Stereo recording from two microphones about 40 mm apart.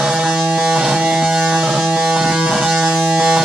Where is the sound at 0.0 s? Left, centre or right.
Centre.